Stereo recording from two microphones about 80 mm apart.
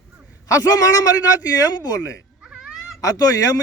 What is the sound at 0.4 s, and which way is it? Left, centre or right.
A man's voice, left.